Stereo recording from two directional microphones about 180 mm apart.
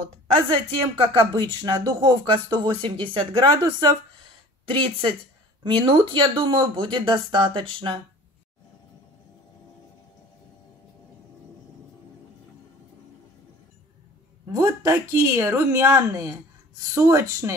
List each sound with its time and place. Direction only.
0.3 s a woman's voice: 30° right (ahead or behind)
14.5 s speech: 20° right (ahead or behind)